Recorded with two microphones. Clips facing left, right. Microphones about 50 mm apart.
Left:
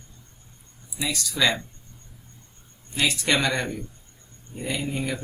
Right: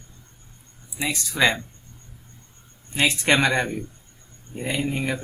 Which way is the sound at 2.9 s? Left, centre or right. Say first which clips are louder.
Right 3 dB; right.